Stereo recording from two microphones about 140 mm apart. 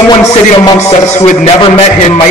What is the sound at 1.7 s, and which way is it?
Speech, 50° left (ahead or behind).